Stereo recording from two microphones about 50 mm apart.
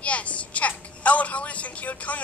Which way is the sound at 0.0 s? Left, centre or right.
Left.